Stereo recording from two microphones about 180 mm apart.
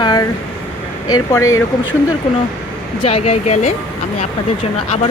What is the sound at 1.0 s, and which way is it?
Speech, 15° left (ahead or behind).